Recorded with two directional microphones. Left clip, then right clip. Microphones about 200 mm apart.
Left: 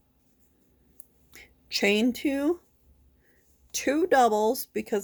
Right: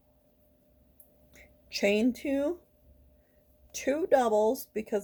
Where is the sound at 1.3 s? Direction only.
50° left (ahead or behind).